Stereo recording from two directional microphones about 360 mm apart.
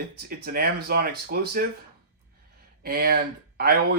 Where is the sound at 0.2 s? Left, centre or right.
Right.